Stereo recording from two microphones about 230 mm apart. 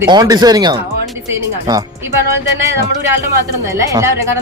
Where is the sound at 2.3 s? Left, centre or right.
Centre.